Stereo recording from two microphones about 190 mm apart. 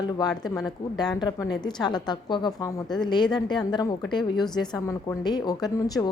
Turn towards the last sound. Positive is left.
turn(degrees=20)  # may be behind; listen again after turning